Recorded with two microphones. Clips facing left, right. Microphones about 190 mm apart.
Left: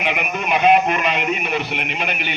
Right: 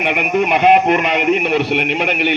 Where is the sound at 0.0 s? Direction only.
60° right (ahead or behind).